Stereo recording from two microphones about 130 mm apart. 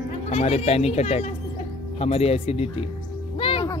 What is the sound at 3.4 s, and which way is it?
Music, 45° left (ahead or behind).